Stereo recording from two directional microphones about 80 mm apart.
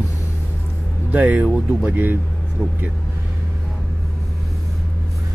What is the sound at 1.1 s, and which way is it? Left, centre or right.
Speech, centre.